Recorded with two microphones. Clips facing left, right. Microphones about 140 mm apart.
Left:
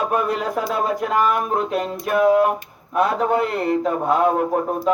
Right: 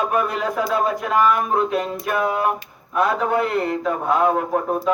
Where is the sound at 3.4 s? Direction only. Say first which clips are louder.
Left 1 dB; 35° left (ahead or behind).